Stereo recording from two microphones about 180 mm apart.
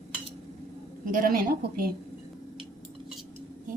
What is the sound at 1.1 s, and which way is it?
Speech, 50° right (ahead or behind).